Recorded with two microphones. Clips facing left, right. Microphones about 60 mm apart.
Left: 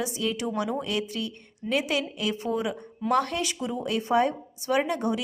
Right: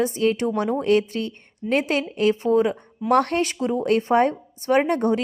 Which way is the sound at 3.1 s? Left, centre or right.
Right.